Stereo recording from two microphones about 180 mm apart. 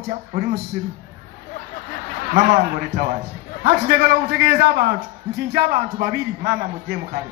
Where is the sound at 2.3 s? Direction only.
65° right (ahead or behind).